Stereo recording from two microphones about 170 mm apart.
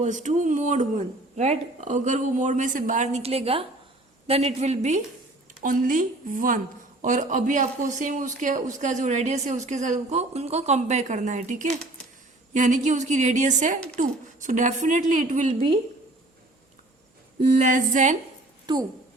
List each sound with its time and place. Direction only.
0.0 s a woman's voice: 45° right (ahead or behind)
5.6 s speech: 55° right (ahead or behind)
17.5 s speech: 45° right (ahead or behind)
18.6 s speech: 25° right (ahead or behind)